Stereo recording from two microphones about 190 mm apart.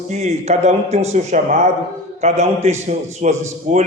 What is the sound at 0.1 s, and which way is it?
A man's voice, 35° right (ahead or behind).